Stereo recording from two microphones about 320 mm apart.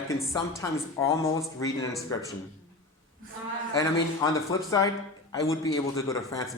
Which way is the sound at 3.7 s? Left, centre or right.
Centre.